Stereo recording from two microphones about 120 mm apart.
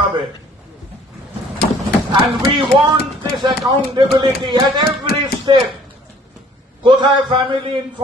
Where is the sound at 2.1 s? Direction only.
40° right (ahead or behind).